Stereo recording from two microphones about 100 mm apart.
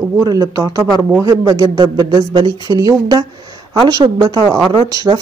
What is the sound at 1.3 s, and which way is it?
A woman's voice, 40° right (ahead or behind).